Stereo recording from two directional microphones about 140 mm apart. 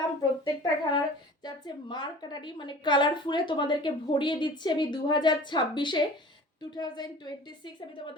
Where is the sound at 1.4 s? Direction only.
30° left (ahead or behind).